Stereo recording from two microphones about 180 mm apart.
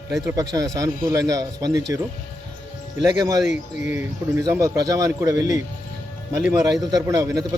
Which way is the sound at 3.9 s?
15° right (ahead or behind).